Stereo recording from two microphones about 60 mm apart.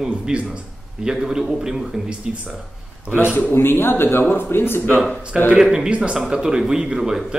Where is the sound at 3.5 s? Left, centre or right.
Left.